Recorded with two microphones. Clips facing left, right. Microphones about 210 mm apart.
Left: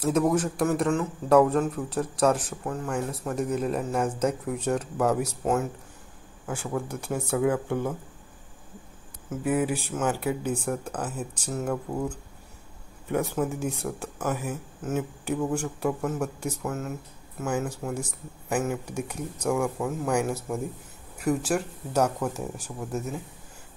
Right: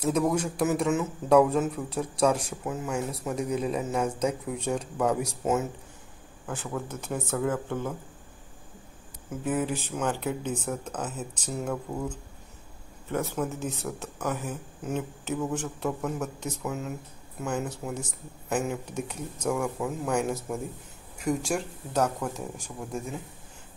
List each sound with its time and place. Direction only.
0.0 s a man's voice: 5° left (ahead or behind)
5.1 s a man's voice: 5° right (ahead or behind); by 7.9 s 15° left (ahead or behind)
9.3 s speech: 10° left (ahead or behind)
10.9 s a man's voice: 5° right (ahead or behind)
13.1 s a man's voice: 15° left (ahead or behind)
21.4 s a man's voice: 5° left (ahead or behind)